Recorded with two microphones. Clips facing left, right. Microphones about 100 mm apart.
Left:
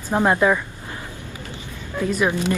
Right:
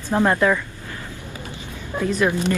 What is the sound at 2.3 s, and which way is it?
Speech, 15° left (ahead or behind).